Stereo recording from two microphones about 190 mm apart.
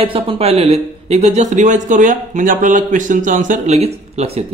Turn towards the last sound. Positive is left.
turn(degrees=-35)  # may be behind; listen again after turning